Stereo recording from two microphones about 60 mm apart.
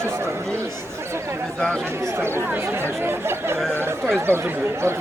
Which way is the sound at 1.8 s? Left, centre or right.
Right.